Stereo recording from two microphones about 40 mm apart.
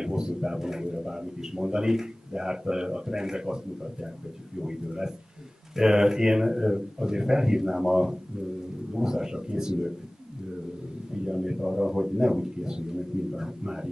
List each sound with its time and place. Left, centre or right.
0.0 s a man's voice: centre
11.2 s a man's voice: centre